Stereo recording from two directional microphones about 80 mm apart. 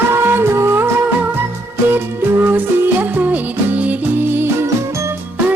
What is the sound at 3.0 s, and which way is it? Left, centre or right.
Music, right.